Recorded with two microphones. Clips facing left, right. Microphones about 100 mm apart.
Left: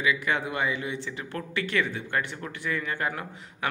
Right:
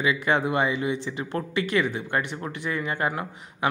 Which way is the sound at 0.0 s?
30° right (ahead or behind).